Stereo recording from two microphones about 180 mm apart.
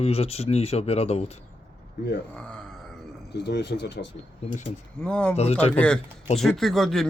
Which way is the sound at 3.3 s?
70° left (ahead or behind).